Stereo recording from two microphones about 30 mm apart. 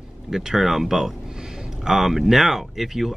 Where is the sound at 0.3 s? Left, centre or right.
Centre.